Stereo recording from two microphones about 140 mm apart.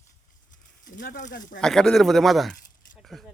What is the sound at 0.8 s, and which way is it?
Speech, 80° left.